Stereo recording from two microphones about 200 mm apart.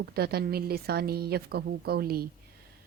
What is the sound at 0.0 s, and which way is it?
Speech, 50° right (ahead or behind).